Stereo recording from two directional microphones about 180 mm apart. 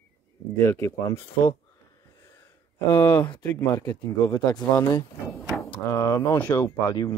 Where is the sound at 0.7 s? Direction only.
15° left (ahead or behind).